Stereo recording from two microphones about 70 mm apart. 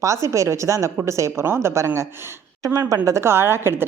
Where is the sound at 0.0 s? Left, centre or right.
Right.